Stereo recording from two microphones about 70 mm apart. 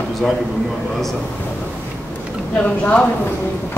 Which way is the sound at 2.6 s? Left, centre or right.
Centre.